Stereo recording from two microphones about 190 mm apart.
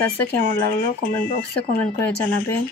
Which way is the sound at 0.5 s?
50° left (ahead or behind).